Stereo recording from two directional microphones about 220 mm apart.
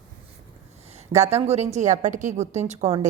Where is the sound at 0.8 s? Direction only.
30° right (ahead or behind).